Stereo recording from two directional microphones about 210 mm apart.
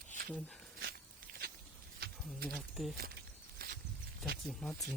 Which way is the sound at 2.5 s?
Centre (ahead or behind).